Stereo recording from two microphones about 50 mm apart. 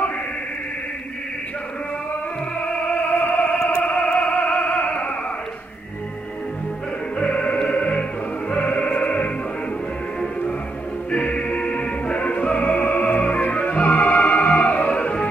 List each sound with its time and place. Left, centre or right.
2.9 s music: left
7.2 s music: left
11.1 s music: left